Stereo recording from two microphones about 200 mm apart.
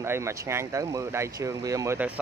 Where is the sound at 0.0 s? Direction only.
15° right (ahead or behind).